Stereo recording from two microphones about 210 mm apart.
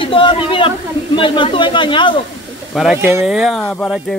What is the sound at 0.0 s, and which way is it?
Speech, 25° left (ahead or behind).